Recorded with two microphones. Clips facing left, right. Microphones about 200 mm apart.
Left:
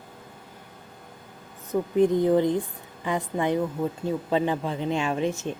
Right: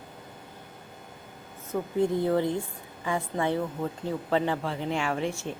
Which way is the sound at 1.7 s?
20° left (ahead or behind).